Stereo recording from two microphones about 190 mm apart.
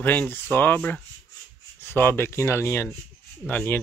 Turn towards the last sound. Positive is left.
turn(degrees=10)  # may be behind; listen again after turning